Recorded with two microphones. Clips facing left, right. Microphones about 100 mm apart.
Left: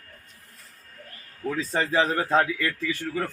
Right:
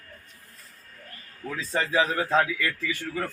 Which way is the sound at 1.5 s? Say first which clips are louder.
Left 2 dB; 40° left (ahead or behind).